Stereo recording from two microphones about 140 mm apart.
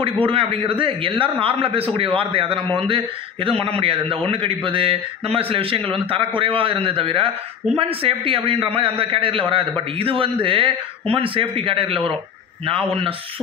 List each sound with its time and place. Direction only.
0.3 s a man's voice: 40° right (ahead or behind)